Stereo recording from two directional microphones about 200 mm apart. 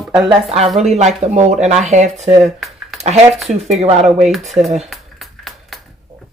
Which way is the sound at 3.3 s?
Centre (ahead or behind).